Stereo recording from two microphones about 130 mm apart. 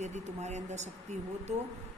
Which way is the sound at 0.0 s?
60° right (ahead or behind).